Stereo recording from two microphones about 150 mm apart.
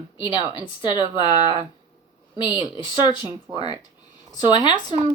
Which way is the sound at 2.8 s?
30° left (ahead or behind).